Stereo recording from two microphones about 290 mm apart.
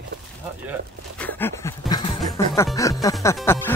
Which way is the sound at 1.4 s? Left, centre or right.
Centre.